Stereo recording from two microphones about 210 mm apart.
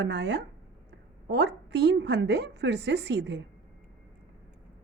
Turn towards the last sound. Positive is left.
turn(degrees=-55)  # may be behind; listen again after turning